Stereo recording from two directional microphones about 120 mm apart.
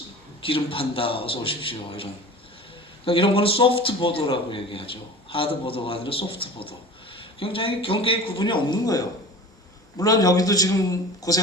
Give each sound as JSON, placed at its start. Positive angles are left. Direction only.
{"t": 0.4, "sound": "a man's voice", "side_deg": 50}